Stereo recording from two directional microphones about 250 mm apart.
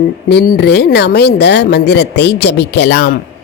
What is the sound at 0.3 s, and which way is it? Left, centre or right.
Speech, left.